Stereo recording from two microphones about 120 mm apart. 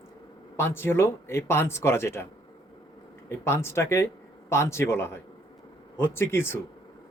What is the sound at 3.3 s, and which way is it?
Speech, 20° left (ahead or behind).